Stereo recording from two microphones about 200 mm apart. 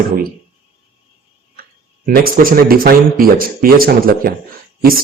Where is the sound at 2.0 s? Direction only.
45° right (ahead or behind).